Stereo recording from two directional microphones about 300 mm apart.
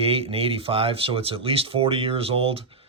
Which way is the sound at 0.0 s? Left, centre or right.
Centre.